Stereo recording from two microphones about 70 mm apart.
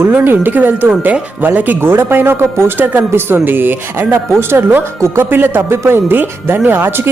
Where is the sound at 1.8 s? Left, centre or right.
Right.